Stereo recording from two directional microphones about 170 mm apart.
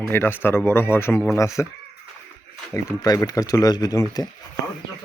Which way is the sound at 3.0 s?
20° left (ahead or behind).